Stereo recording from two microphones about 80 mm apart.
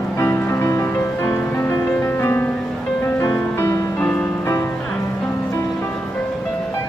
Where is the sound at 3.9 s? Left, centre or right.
Centre.